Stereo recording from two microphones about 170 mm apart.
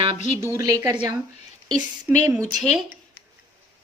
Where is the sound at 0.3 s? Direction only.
15° right (ahead or behind).